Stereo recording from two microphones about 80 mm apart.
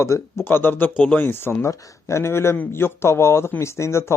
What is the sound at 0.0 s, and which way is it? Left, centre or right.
Speech, left.